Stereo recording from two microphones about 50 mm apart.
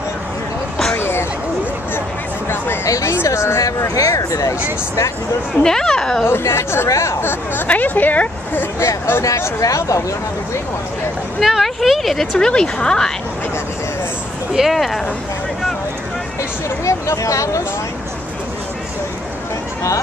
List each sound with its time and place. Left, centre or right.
0.9 s a sound: left
2.8 s speech: left
5.6 s speech: centre
6.2 s speech: left
7.2 s speech: left
7.6 s a woman's voice: left
8.7 s speech: left
11.4 s a sound: centre
12.4 s speech: centre
14.7 s speech: centre
16.8 s speech: left